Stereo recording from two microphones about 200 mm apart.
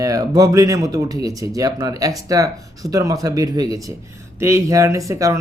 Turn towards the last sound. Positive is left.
turn(degrees=-15)  # may be behind; listen again after turning